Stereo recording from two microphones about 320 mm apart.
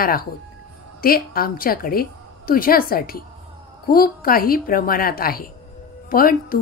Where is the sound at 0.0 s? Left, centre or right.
Left.